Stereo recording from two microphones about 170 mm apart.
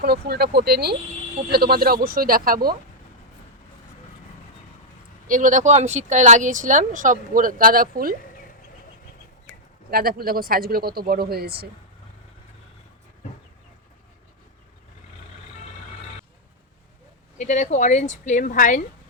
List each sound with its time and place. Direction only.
0.0 s speech: 70° right (ahead or behind)
5.3 s speech: 50° right (ahead or behind)
9.9 s speech: 60° right (ahead or behind)
17.3 s speech: 45° left (ahead or behind)